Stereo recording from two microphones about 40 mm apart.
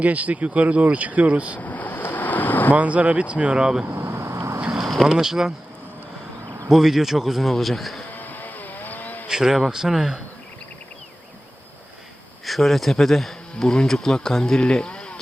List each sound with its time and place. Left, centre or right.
0.0 s speech: right
1.5 s vehicle: left
2.7 s speech: right
3.8 s vehicle: right
4.8 s a sound: centre
5.1 s speech: centre
6.7 s a man's voice: centre
8.1 s vehicle: left
9.2 s speech: centre
12.5 s speech: centre
14.6 s sheep: left